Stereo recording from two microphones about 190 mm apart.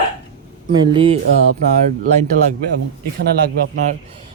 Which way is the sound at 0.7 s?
25° right (ahead or behind).